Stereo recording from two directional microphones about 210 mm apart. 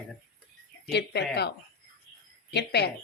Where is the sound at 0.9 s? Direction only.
50° left (ahead or behind).